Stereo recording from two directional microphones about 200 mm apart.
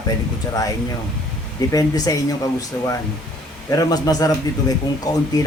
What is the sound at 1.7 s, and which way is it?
Speech, 15° left (ahead or behind).